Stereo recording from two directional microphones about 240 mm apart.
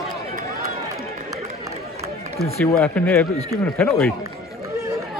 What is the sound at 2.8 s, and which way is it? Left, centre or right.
Speech, centre.